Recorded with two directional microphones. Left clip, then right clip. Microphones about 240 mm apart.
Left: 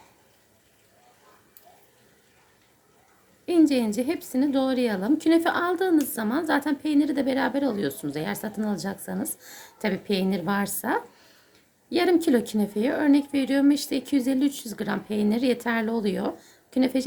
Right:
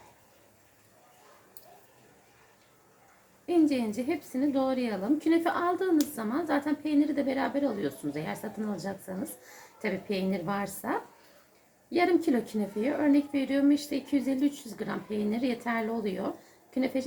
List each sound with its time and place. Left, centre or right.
3.4 s speech: left
11.9 s speech: left